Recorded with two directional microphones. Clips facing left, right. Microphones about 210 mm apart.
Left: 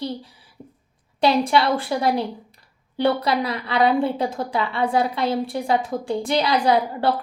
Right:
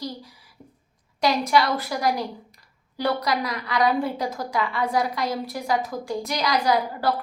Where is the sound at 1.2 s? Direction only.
30° left (ahead or behind).